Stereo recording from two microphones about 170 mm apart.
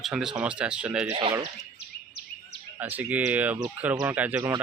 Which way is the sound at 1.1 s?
35° right (ahead or behind).